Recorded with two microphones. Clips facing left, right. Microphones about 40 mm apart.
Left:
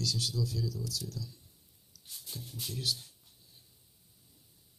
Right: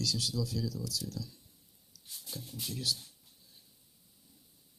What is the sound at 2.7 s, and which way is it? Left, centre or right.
Speech, left.